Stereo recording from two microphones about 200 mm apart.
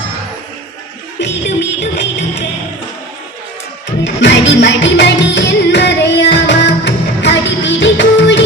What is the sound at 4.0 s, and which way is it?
Music, 65° left (ahead or behind).